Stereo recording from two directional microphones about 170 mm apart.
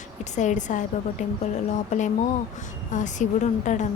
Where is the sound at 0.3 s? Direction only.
45° left (ahead or behind).